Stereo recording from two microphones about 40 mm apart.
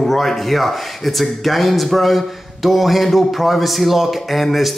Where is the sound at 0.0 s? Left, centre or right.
Centre.